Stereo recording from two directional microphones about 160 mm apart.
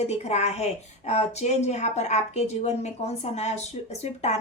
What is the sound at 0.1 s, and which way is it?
A woman's voice, 45° left (ahead or behind).